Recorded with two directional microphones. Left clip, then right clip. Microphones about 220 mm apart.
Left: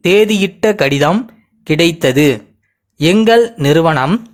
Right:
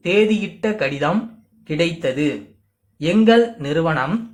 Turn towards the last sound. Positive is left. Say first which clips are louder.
# left 9 dB
turn(degrees=45)  # may be behind; listen again after turning